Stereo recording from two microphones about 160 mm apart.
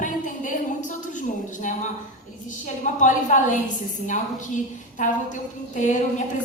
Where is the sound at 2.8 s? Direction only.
50° left (ahead or behind).